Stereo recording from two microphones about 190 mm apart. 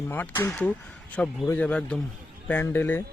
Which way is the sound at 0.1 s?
10° left (ahead or behind).